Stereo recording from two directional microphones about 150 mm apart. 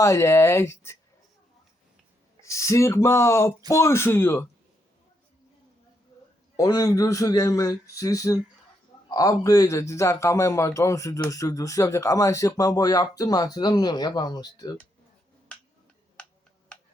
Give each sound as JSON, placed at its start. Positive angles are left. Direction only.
{"t": 0.0, "sound": "speech", "side_deg": 20}
{"t": 2.4, "sound": "speech", "side_deg": 20}
{"t": 6.6, "sound": "speech", "side_deg": 20}